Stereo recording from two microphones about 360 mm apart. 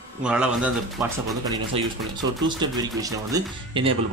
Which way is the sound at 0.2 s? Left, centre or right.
Centre.